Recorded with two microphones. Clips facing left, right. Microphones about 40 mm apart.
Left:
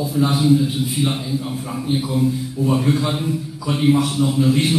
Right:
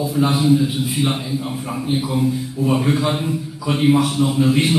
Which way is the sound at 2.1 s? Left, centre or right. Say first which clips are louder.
Even; centre.